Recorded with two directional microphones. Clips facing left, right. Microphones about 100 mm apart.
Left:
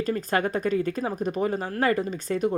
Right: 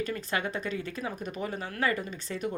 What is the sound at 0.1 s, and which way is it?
Speech, 45° left (ahead or behind).